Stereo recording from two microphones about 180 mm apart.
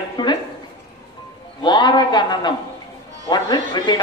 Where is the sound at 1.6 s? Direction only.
25° left (ahead or behind).